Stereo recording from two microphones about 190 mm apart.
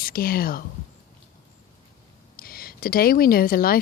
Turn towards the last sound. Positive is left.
turn(degrees=50)  # may be behind; listen again after turning